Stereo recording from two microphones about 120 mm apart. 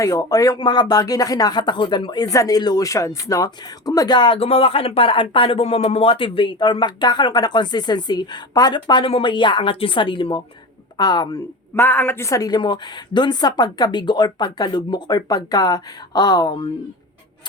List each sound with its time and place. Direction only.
0.0 s speech: 30° left (ahead or behind)
11.7 s speech: 15° left (ahead or behind); by 16.6 s 35° left (ahead or behind)